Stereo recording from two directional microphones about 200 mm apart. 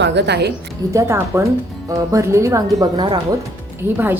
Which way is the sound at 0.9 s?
15° right (ahead or behind).